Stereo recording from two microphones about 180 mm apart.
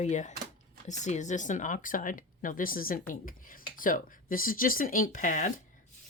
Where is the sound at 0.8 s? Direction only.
40° left (ahead or behind).